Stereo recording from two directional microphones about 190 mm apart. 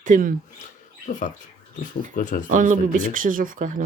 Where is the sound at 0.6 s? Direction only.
40° left (ahead or behind).